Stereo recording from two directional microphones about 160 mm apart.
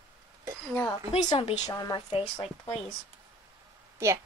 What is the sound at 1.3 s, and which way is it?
Speech, 30° left (ahead or behind).